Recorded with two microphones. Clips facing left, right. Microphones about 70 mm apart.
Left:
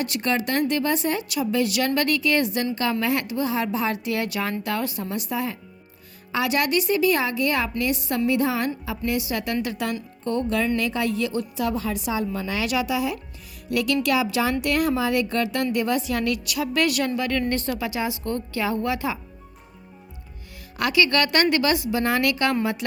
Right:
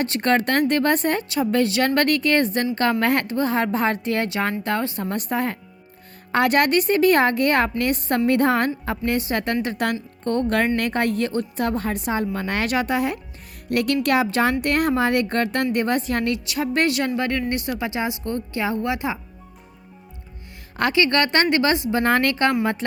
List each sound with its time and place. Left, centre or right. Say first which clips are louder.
0.0 s a woman's voice: right 4 dB; right
5.0 s a woman's voice: right 3 dB; right
9.7 s a woman's voice: right 4 dB; right
17.5 s speech: right 1 dB; centre
20.7 s a woman's voice: right 2 dB; right
21.9 s a woman's voice: right 3 dB; right